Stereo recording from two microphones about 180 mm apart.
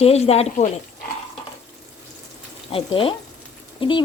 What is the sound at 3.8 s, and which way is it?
Stir, 25° left (ahead or behind).